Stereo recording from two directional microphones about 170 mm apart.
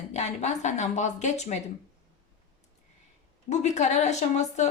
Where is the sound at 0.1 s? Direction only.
40° left (ahead or behind).